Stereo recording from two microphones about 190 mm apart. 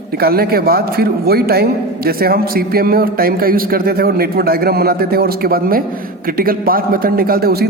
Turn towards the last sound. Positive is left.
turn(degrees=-55)  # may be behind; listen again after turning